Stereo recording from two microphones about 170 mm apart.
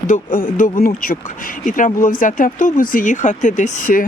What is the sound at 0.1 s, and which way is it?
Speech, 50° left (ahead or behind).